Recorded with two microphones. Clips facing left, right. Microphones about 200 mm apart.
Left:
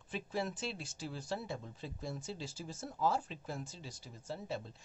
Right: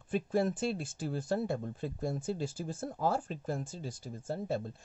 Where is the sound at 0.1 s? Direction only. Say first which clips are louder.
Right 8 dB; 50° right (ahead or behind).